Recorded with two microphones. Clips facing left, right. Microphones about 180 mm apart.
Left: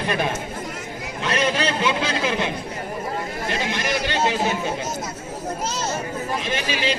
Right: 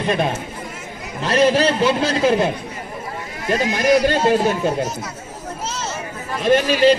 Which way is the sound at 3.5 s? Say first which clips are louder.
Right 10 dB; 45° right (ahead or behind).